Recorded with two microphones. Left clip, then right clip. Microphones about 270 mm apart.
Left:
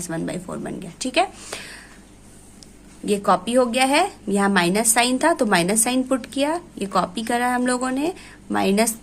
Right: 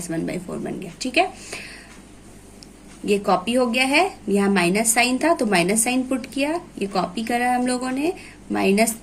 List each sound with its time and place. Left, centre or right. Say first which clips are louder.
0.1 s a woman's voice: right 1 dB; left
1.5 s a sound: even; left
3.1 s a woman's voice: left 1 dB; left